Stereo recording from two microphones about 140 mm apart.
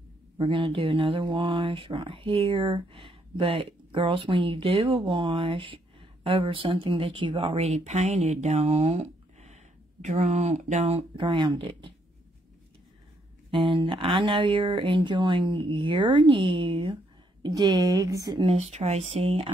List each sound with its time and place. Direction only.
0.4 s speech: 35° right (ahead or behind)
13.5 s speech: 35° right (ahead or behind)
18.4 s speech: 45° right (ahead or behind)